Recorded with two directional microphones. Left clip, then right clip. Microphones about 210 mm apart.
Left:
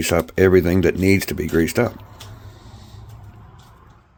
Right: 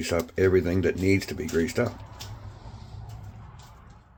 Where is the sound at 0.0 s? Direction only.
55° left (ahead or behind).